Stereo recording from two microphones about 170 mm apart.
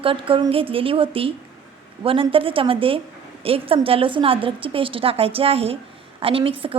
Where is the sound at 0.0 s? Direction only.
30° right (ahead or behind).